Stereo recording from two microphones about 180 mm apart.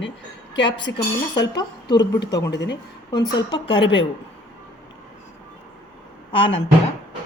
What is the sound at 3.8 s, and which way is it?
Speech, 90° left.